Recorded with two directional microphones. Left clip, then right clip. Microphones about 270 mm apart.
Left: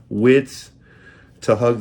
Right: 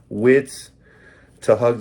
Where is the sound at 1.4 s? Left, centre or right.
Centre.